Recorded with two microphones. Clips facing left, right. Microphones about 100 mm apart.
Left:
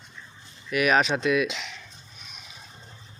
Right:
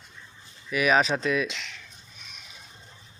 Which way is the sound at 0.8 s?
Centre (ahead or behind).